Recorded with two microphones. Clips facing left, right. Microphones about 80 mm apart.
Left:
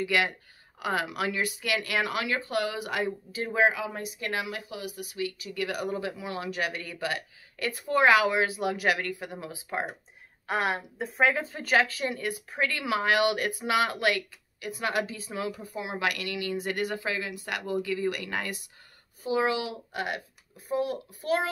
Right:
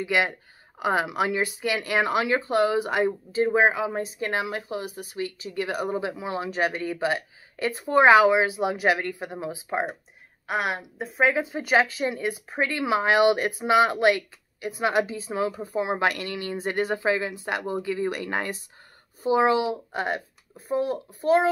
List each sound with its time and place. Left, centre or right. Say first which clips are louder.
0.0 s speech: right 2 dB; right
10.4 s speech: right 1 dB; centre; by 21.5 s right